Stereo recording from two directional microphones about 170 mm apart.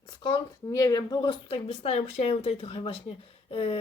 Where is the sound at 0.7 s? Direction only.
20° left (ahead or behind).